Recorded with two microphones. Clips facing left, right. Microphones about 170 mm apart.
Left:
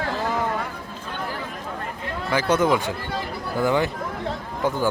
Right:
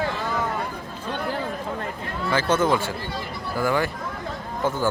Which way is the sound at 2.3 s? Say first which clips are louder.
Left 1 dB; 10° left (ahead or behind).